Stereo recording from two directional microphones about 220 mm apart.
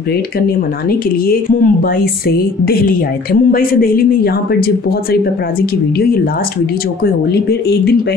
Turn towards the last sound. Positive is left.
turn(degrees=45)  # may be behind; listen again after turning